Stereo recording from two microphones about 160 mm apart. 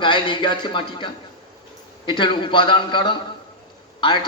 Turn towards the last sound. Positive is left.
turn(degrees=30)  # may be behind; listen again after turning